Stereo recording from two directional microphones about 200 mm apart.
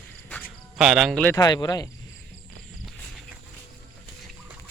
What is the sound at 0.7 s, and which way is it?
Speech, centre (ahead or behind).